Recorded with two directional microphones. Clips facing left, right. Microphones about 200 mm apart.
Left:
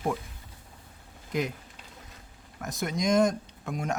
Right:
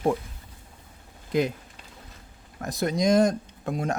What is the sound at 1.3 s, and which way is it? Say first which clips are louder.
Speech: right 6 dB; 30° right (ahead or behind).